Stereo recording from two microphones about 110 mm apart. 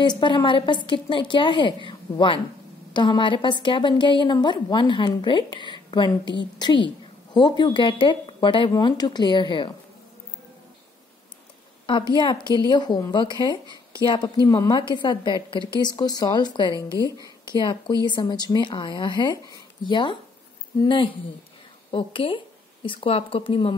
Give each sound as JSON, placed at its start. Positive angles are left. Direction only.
{"t": 0.2, "sound": "a woman's voice", "side_deg": 50}
{"t": 11.8, "sound": "a sound", "side_deg": 50}
{"t": 12.2, "sound": "a woman's voice", "side_deg": 45}